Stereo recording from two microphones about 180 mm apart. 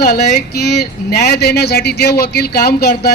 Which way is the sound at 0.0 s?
60° left (ahead or behind).